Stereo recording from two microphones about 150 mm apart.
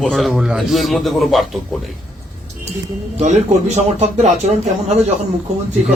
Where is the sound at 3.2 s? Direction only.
45° right (ahead or behind).